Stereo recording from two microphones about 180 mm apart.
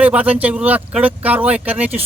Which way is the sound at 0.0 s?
10° right (ahead or behind).